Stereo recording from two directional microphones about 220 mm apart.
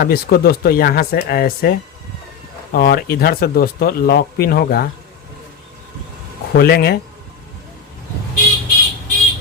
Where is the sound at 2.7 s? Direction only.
40° left (ahead or behind).